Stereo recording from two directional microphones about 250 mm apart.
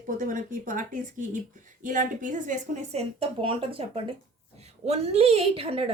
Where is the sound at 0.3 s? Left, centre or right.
Right.